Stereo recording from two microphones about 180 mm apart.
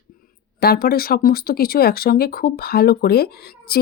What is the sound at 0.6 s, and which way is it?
Speech, 60° left (ahead or behind).